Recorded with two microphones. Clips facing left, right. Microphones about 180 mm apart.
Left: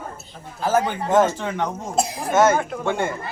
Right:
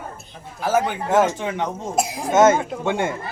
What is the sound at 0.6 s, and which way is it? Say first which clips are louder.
A man's voice: even; 10° right (ahead or behind).